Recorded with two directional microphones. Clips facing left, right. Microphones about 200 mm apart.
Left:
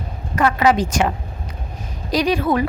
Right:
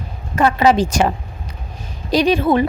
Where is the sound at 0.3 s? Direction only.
30° right (ahead or behind).